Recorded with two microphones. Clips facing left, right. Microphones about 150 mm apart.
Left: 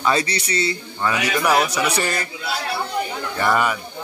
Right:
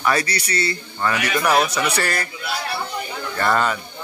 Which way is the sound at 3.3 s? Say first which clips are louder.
Even; 10° left (ahead or behind).